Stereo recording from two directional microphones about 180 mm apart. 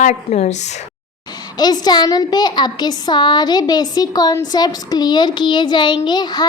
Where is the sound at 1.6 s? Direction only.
20° left (ahead or behind).